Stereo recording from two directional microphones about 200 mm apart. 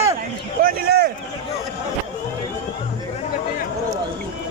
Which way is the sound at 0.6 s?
45° right (ahead or behind).